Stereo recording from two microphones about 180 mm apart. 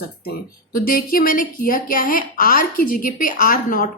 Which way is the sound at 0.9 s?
55° left (ahead or behind).